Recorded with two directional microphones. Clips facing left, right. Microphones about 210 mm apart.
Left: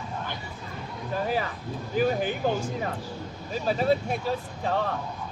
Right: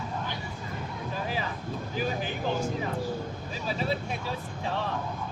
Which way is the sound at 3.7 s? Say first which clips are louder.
Left 7 dB; 50° left (ahead or behind).